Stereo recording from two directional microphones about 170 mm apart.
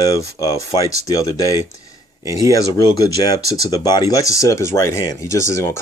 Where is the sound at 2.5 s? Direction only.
20° left (ahead or behind).